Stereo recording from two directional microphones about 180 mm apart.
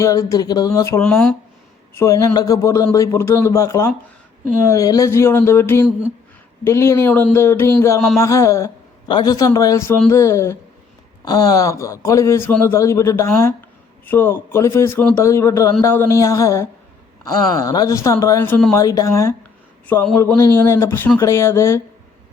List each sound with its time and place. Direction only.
0.0 s a sound: 20° left (ahead or behind)
1.0 s a man's voice: 5° left (ahead or behind)
2.0 s a man's voice: 20° left (ahead or behind)